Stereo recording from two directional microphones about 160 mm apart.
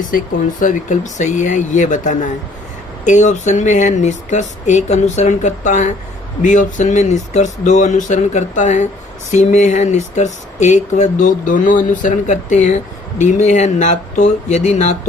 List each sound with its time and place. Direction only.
0.6 s speech: 50° left (ahead or behind)